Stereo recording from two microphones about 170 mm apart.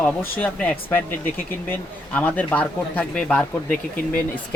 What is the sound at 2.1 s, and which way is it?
Speech, 10° left (ahead or behind).